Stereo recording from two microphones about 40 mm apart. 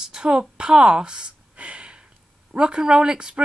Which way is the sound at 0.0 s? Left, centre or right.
Right.